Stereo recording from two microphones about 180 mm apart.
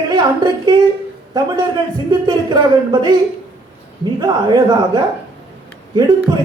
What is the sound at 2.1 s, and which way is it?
Speech, 25° right (ahead or behind).